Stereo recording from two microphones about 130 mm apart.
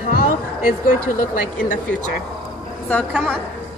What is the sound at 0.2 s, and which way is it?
Speech, 90° left.